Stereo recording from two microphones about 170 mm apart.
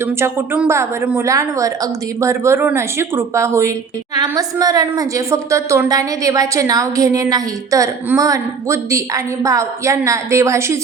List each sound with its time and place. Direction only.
0.0 s a woman's voice: 15° right (ahead or behind)